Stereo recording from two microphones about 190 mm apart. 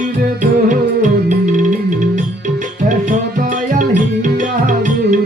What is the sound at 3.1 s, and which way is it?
Music, 45° right (ahead or behind).